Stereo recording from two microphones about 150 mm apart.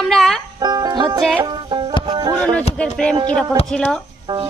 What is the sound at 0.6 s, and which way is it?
Music, 25° right (ahead or behind).